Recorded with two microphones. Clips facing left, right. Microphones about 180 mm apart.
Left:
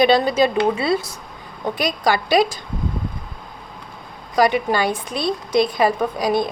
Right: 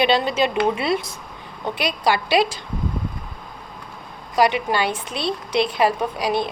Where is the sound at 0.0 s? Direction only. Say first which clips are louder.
Left 4 dB; 40° left (ahead or behind).